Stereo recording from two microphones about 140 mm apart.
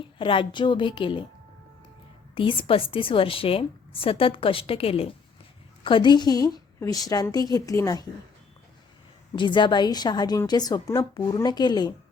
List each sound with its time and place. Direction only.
0.0 s a woman's voice: 40° left (ahead or behind)
2.3 s a woman's voice: 40° left (ahead or behind)
9.3 s a woman's voice: 35° left (ahead or behind)